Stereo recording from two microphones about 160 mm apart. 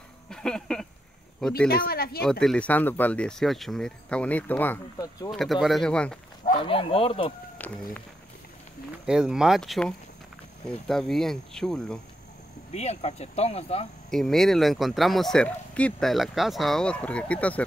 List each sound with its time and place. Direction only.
0.3 s a sound: 5° left (ahead or behind)
1.7 s speech: 70° left (ahead or behind)
2.4 s speech: 5° left (ahead or behind)
4.9 s speech: 20° left (ahead or behind)
5.3 s speech: centre (ahead or behind)
6.5 s speech: 30° left (ahead or behind)
7.6 s a sound: 10° left (ahead or behind)
9.0 s speech: 5° right (ahead or behind)
12.7 s speech: 45° left (ahead or behind)
14.1 s speech: 5° left (ahead or behind)